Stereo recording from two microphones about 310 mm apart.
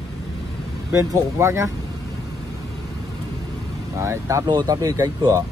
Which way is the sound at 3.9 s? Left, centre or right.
Centre.